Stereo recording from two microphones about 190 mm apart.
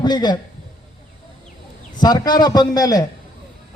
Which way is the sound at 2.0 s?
20° left (ahead or behind).